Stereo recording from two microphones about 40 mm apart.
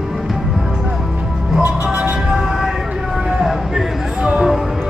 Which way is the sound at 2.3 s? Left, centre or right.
Centre.